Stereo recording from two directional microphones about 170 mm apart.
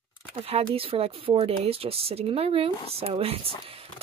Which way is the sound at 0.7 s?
35° right (ahead or behind).